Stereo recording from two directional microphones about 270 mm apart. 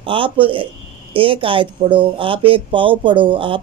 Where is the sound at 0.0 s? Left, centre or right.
Centre.